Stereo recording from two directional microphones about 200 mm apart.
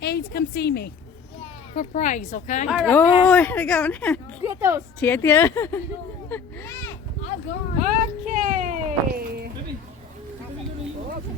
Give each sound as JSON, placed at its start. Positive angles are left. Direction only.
{"t": 0.0, "sound": "a woman's voice", "side_deg": 55}
{"t": 1.7, "sound": "speech", "side_deg": 35}
{"t": 2.6, "sound": "speech", "side_deg": 0}
{"t": 4.4, "sound": "speech", "side_deg": -15}
{"t": 4.9, "sound": "speech", "side_deg": 10}
{"t": 8.2, "sound": "a sound", "side_deg": -40}